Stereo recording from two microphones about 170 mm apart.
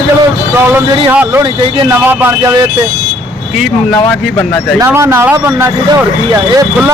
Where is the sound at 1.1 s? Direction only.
10° right (ahead or behind).